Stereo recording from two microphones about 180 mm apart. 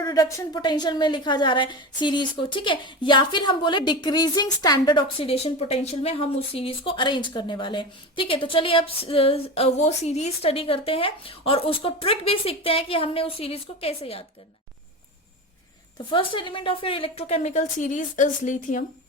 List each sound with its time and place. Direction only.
0.0 s a woman's voice: 20° left (ahead or behind)
16.0 s a woman's voice: 25° left (ahead or behind); by 18.9 s 45° left (ahead or behind)